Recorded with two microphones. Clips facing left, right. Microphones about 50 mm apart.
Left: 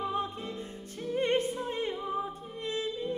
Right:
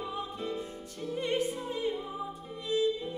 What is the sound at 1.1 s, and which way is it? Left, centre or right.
Music, left.